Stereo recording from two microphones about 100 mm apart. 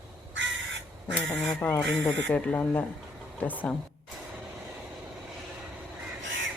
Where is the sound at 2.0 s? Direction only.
10° left (ahead or behind).